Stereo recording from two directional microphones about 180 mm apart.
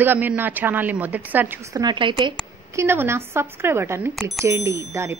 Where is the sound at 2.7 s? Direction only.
15° right (ahead or behind).